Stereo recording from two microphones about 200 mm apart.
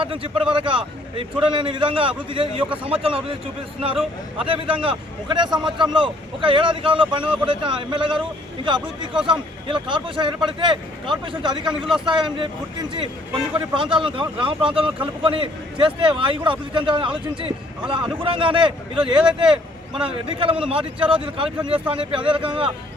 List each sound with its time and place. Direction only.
0.0 s a man's voice: 25° right (ahead or behind)
4.4 s a man's voice: 25° right (ahead or behind)
9.2 s a man's voice: 25° right (ahead or behind)
19.1 s speech: 5° right (ahead or behind)
19.5 s vehicle: 5° right (ahead or behind)
20.1 s a man's voice: 25° right (ahead or behind)